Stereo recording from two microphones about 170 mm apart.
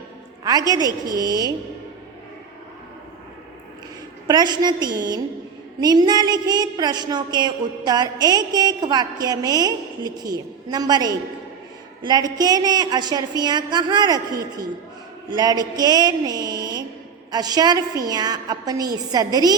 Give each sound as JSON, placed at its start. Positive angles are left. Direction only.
{"t": 0.4, "sound": "a woman's voice", "side_deg": -20}
{"t": 4.3, "sound": "a woman's voice", "side_deg": -25}